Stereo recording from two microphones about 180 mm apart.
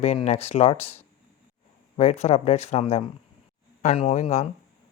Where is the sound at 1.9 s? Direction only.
40° left (ahead or behind).